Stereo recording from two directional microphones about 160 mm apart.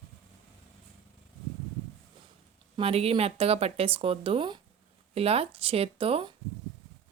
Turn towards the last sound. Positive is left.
turn(degrees=-35)  # may be behind; listen again after turning